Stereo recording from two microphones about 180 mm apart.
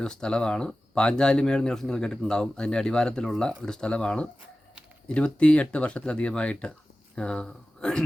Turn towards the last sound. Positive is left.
turn(degrees=5)  # may be behind; listen again after turning